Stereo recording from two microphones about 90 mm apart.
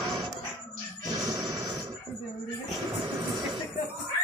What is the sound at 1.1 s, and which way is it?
Music, 40° right (ahead or behind).